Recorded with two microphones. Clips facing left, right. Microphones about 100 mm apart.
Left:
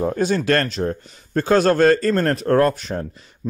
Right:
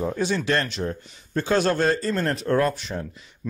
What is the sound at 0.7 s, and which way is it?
A man's voice, 40° left (ahead or behind).